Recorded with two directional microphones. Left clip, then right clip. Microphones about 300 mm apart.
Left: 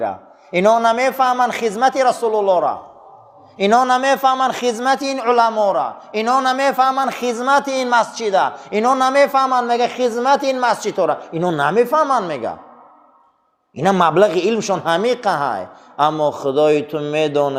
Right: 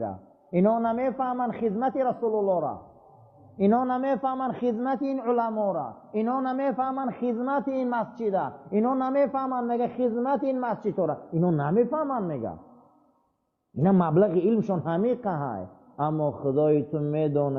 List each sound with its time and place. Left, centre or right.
0.0 s a man's voice: centre
13.8 s a man's voice: centre
16.1 s a man's voice: left
16.5 s a man's voice: centre